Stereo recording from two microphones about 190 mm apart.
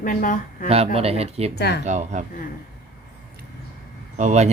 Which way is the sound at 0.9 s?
35° right (ahead or behind).